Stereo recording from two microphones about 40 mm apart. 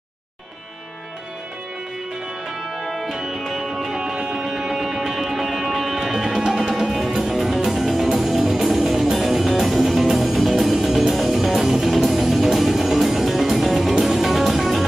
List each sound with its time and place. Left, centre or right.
2.8 s music: centre
4.0 s music: centre
4.5 s music: centre
7.1 s music: centre
7.3 s music: centre